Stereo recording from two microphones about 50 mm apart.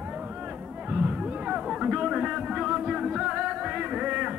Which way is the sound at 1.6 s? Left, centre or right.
Centre.